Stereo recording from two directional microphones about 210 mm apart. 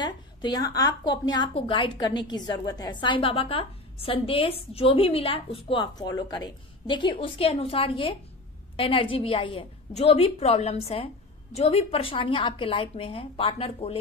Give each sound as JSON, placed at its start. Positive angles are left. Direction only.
{"t": 0.0, "sound": "a woman's voice", "side_deg": 20}